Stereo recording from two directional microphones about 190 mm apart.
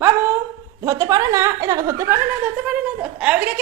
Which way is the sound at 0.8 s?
15° right (ahead or behind).